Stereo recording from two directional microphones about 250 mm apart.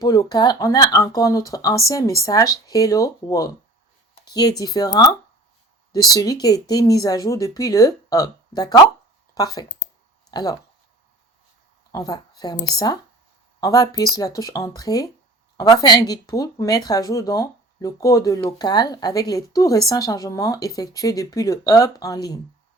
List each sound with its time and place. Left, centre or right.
0.0 s speech: centre
11.9 s a woman's voice: centre